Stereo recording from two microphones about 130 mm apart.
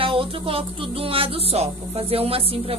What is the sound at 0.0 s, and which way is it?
Music, 45° right (ahead or behind).